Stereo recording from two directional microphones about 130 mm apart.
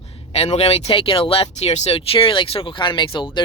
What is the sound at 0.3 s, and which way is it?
Speech, 50° left (ahead or behind).